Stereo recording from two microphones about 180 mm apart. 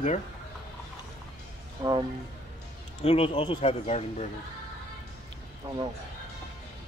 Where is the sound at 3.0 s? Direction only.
30° left (ahead or behind).